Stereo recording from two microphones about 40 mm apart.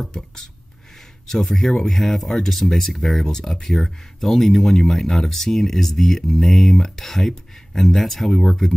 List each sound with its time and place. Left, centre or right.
0.0 s speech: centre